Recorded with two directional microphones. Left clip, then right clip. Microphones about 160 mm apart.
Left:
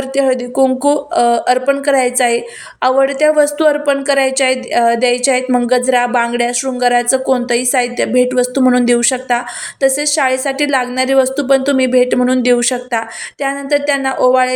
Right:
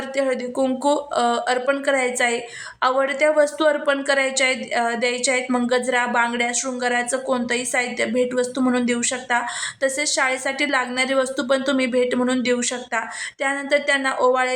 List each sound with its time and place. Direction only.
0.2 s a woman's voice: 20° left (ahead or behind)